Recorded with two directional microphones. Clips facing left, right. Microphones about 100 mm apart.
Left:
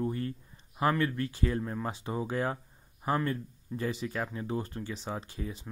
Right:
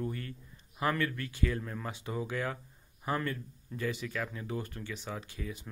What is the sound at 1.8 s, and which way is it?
Speech, 35° left (ahead or behind).